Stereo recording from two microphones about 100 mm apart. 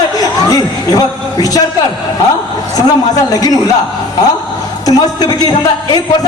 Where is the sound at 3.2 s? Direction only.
40° left (ahead or behind).